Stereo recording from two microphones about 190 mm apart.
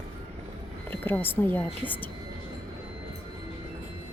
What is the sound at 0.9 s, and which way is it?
A woman's voice, 10° left (ahead or behind).